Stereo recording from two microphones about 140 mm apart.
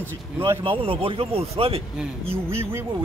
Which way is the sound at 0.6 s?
40° right (ahead or behind).